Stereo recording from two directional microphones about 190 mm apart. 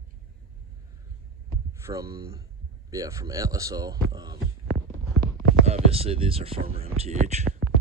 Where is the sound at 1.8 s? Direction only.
15° right (ahead or behind).